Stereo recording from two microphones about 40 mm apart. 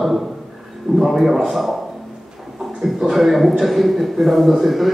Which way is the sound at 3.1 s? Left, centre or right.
Centre.